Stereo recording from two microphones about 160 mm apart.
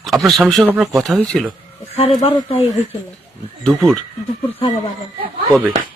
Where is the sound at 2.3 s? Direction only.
35° left (ahead or behind).